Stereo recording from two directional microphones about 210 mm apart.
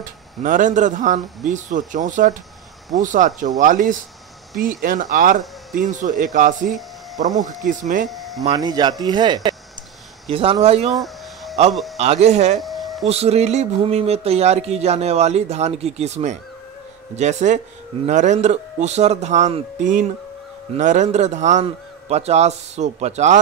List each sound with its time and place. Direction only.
0.0 s speech: 40° right (ahead or behind)
7.2 s speech: 20° right (ahead or behind)
8.1 s speech: centre (ahead or behind)
8.5 s speech: 20° right (ahead or behind)
10.9 s a sound: centre (ahead or behind)
12.0 s speech: 30° right (ahead or behind)
12.5 s a sound: centre (ahead or behind)
13.0 s speech: 30° right (ahead or behind)